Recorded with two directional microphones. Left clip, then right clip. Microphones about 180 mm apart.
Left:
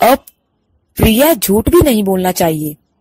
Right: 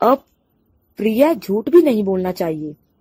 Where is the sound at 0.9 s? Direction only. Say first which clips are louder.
Left 5 dB; 55° left (ahead or behind).